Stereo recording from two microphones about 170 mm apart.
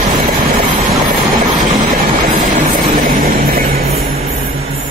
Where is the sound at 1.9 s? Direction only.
55° right (ahead or behind).